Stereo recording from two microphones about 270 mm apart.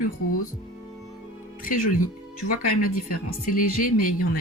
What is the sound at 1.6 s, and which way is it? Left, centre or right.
Speech, left.